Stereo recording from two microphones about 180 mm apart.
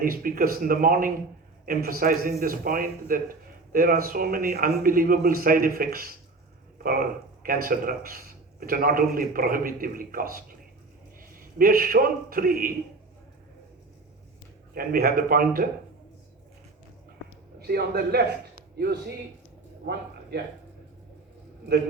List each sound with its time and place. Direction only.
0.0 s a man's voice: 50° right (ahead or behind)
14.8 s a man's voice: 55° right (ahead or behind)
17.6 s a man's voice: 60° right (ahead or behind)
19.8 s a sound: 65° right (ahead or behind)